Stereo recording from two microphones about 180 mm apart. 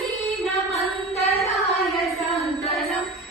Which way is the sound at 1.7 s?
Centre (ahead or behind).